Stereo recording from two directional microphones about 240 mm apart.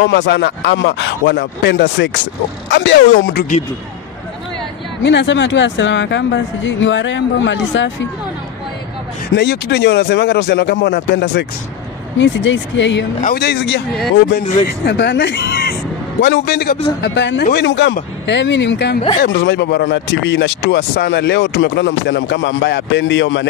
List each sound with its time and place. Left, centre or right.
0.0 s speech: left
5.0 s speech: left
9.3 s speech: left
14.9 s speech: left